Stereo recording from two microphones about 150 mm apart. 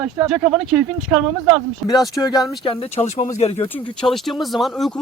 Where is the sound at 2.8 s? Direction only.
45° left (ahead or behind).